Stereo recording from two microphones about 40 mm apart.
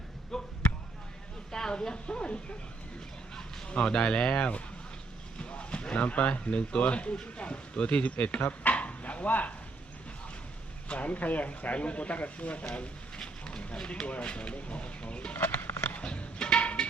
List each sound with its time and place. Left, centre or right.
0.3 s basketball bounce: centre
1.5 s speech: centre
3.7 s speech: left
5.4 s vehicle: left
6.0 s speech: left
8.4 s a sound: left
10.8 s speech: left
12.7 s a sound: left
14.1 s speech: left
15.4 s a sound: left
16.0 s music: left